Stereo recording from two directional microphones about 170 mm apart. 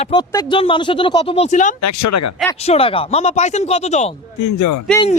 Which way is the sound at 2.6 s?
35° left (ahead or behind).